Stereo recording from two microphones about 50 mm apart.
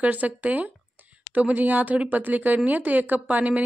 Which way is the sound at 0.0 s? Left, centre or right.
Right.